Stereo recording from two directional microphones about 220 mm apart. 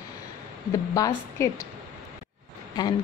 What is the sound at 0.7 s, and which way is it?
Speech, 15° left (ahead or behind).